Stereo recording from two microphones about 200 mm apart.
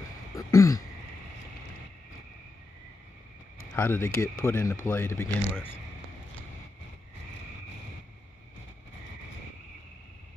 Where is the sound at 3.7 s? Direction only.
10° left (ahead or behind).